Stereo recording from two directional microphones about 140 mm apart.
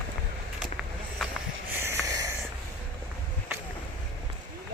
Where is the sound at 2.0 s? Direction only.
25° right (ahead or behind).